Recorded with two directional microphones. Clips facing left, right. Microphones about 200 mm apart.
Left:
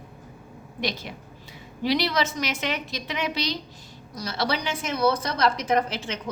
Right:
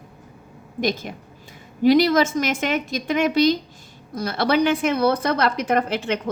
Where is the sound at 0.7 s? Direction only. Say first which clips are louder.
Right 7 dB; 45° right (ahead or behind).